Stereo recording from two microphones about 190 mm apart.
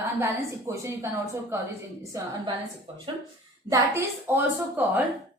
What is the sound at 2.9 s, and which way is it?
Speech, 30° right (ahead or behind).